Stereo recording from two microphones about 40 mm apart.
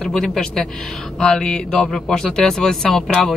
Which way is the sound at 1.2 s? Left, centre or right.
Left.